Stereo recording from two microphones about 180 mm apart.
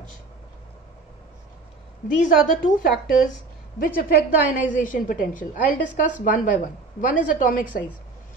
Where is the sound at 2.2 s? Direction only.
45° left (ahead or behind).